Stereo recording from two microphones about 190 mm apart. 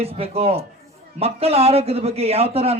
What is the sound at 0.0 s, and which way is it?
A man's voice, 30° right (ahead or behind).